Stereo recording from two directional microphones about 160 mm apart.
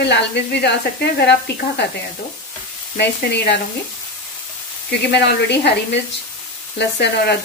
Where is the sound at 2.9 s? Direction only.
90° left.